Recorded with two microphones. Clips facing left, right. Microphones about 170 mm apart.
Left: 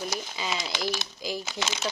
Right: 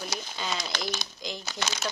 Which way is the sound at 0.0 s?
5° left (ahead or behind).